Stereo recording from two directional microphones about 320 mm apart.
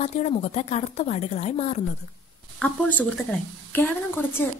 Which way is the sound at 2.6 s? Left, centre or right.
Centre.